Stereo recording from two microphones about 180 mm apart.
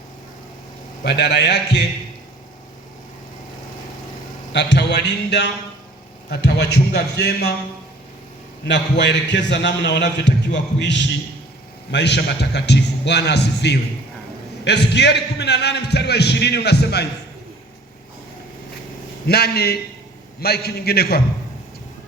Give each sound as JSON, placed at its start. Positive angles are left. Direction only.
{"t": 1.0, "sound": "a man's voice", "side_deg": 70}
{"t": 4.5, "sound": "a man's voice", "side_deg": 70}
{"t": 8.6, "sound": "a man's voice", "side_deg": 75}
{"t": 19.3, "sound": "a man's voice", "side_deg": 60}